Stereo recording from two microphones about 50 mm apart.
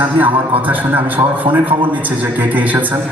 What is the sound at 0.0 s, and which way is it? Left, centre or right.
A man's voice, right.